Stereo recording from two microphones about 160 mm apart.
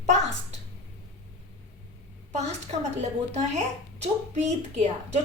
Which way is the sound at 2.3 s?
45° right (ahead or behind).